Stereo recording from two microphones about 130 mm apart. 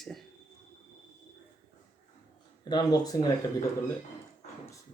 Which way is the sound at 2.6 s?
30° left (ahead or behind).